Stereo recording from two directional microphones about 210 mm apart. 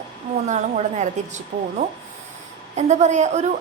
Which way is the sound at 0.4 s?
35° right (ahead or behind).